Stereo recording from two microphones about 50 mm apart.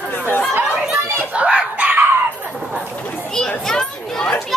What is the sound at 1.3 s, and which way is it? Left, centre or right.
Chicken, right.